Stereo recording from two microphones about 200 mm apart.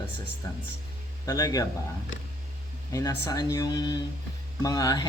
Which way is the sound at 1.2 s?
20° left (ahead or behind).